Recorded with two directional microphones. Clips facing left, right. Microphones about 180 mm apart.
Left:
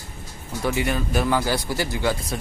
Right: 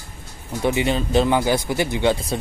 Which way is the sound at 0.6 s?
20° right (ahead or behind).